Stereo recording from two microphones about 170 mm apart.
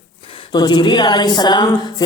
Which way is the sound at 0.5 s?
25° left (ahead or behind).